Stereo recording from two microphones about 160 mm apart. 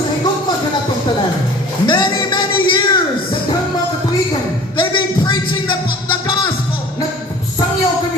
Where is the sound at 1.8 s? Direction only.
30° left (ahead or behind).